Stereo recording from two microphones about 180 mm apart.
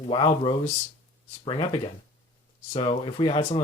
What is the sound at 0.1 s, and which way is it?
Speech, 25° left (ahead or behind).